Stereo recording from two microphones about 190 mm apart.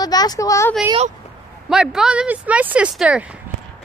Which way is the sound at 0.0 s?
20° left (ahead or behind).